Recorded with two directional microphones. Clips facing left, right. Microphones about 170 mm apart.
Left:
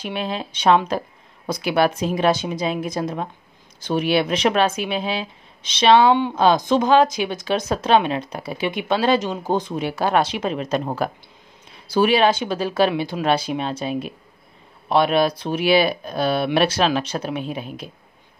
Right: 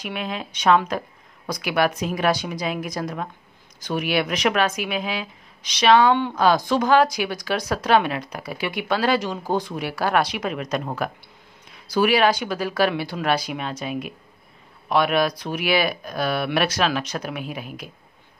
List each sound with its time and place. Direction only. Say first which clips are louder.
0.0 s speech: left 3 dB; 30° left (ahead or behind)